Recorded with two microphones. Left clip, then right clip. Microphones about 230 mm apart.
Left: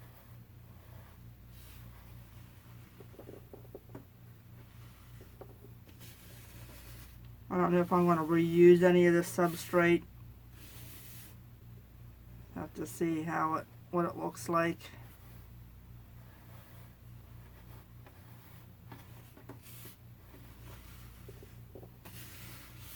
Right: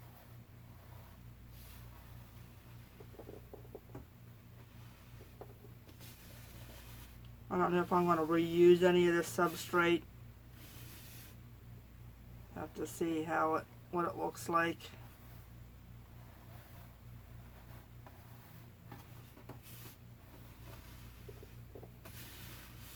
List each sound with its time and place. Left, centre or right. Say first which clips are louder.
7.4 s speech: left 3 dB; left
12.5 s speech: left 2 dB; left